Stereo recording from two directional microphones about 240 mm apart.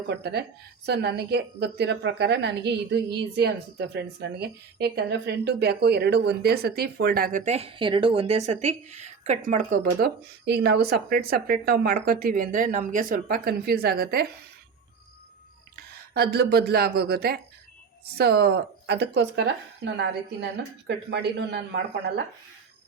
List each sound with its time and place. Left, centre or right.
0.1 s a woman's voice: right
15.7 s speech: right